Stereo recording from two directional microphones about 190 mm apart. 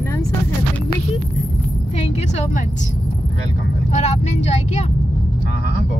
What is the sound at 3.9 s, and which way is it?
Speech, 35° left (ahead or behind).